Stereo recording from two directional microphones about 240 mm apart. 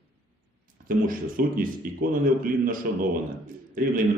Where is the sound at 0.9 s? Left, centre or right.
Right.